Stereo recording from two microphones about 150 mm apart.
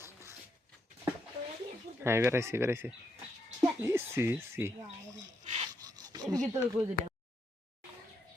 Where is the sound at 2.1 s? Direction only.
15° right (ahead or behind).